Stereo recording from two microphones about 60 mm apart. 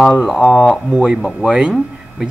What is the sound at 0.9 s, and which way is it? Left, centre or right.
Speech, centre.